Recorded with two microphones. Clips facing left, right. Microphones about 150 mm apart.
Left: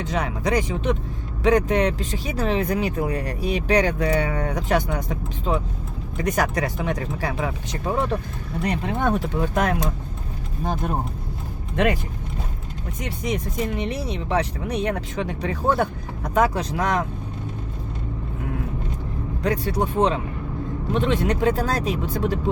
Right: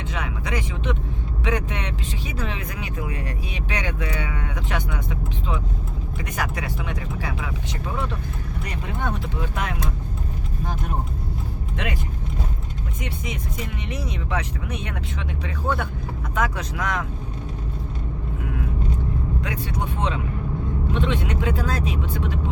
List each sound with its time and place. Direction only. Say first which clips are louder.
0.0 s speech: left 6 dB; 40° left (ahead or behind)
13.0 s speech: left 6 dB; 40° left (ahead or behind)
19.4 s speech: left 6 dB; 40° left (ahead or behind)